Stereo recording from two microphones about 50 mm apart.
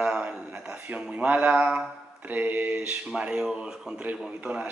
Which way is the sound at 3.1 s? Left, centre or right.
Centre.